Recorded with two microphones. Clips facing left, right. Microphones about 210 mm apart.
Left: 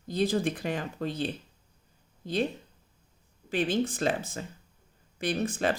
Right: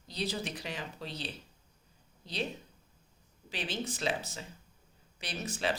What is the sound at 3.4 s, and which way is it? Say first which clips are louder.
Speech: left 10 dB; 50° left (ahead or behind).